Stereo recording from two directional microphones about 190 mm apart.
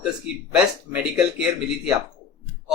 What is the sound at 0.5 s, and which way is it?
Speech, 5° right (ahead or behind).